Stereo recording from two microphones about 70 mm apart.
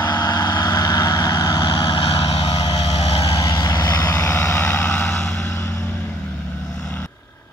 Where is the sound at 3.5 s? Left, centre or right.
Left.